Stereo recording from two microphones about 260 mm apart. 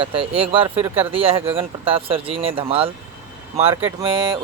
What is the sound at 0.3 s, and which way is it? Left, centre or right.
Speech, right.